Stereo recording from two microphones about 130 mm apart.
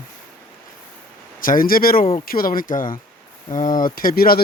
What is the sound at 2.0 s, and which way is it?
Speech, 80° left.